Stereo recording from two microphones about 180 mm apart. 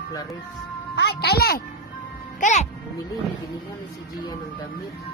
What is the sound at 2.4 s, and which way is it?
Speech, 40° left (ahead or behind).